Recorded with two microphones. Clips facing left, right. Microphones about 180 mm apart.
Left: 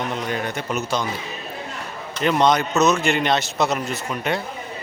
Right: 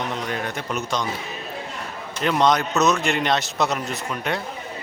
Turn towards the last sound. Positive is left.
turn(degrees=0)  # may be behind; listen again after turning